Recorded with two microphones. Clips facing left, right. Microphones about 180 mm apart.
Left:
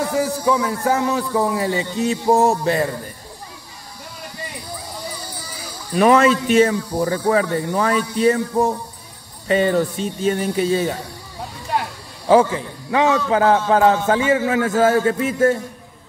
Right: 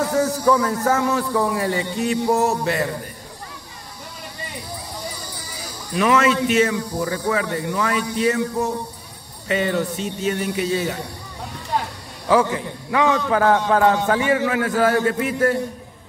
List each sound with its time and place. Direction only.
0.1 s a man's voice: 10° left (ahead or behind); by 2.9 s 30° left (ahead or behind)
5.9 s speech: 35° left (ahead or behind)
12.9 s a man's voice: 25° left (ahead or behind)